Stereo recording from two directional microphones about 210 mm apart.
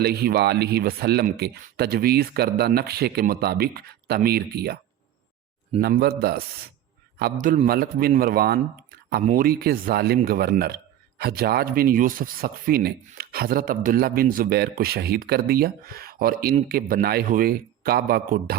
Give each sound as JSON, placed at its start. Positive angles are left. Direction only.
{"t": 0.0, "sound": "speech", "side_deg": -50}
{"t": 5.8, "sound": "speech", "side_deg": -45}